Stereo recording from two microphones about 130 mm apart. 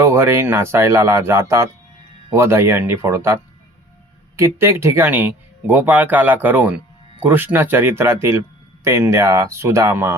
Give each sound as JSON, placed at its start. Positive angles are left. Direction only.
{"t": 0.0, "sound": "speech", "side_deg": -20}